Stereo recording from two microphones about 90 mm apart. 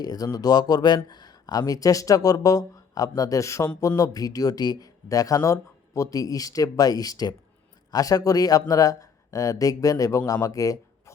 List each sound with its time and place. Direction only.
0.0 s speech: 50° left (ahead or behind)